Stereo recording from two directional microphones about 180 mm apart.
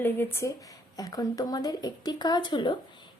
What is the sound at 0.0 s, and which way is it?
Speech, 10° left (ahead or behind).